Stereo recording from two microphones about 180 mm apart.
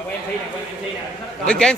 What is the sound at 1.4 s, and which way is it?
Speech, 5° left (ahead or behind).